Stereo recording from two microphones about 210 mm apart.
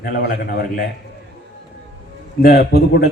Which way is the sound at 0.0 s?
50° left (ahead or behind).